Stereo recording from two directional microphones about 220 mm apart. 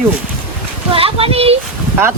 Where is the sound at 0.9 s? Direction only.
25° right (ahead or behind).